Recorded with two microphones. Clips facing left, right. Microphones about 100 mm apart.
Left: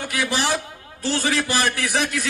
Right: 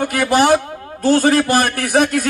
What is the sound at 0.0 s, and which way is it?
A man's voice, 50° right (ahead or behind).